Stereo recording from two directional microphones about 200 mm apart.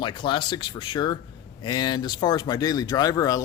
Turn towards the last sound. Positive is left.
turn(degrees=15)  # may be behind; listen again after turning